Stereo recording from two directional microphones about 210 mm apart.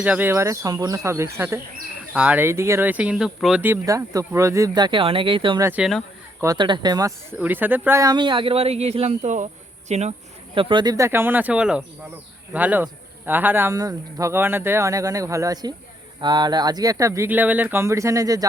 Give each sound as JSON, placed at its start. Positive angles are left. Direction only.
{"t": 0.0, "sound": "speech", "side_deg": -10}
{"t": 5.6, "sound": "speech", "side_deg": -5}
{"t": 6.4, "sound": "speech", "side_deg": -20}